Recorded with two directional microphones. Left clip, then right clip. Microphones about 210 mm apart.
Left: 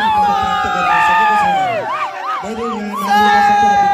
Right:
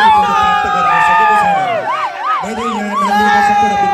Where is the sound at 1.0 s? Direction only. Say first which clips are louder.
Right 2 dB; 50° left (ahead or behind).